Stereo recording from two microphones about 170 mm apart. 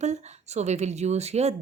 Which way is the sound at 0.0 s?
40° right (ahead or behind).